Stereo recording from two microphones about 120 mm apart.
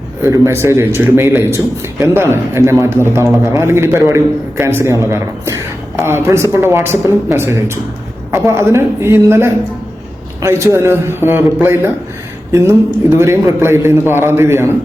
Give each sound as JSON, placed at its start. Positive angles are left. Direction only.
{"t": 0.2, "sound": "speech", "side_deg": -25}